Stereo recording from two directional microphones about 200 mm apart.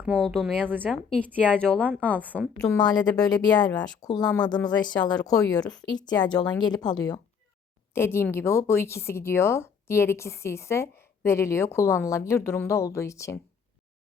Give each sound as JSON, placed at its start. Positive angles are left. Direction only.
{"t": 0.0, "sound": "a woman's voice", "side_deg": 0}
{"t": 1.1, "sound": "speech", "side_deg": 5}
{"t": 2.0, "sound": "a woman's voice", "side_deg": -10}
{"t": 2.8, "sound": "a woman's voice", "side_deg": 20}